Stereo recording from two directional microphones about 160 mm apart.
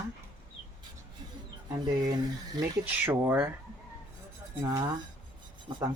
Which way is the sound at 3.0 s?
15° right (ahead or behind).